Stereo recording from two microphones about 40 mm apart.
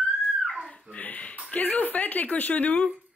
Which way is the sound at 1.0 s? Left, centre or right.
Left.